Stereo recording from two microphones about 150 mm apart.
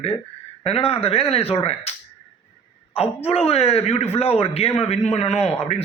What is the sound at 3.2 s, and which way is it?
Speech, 45° left (ahead or behind).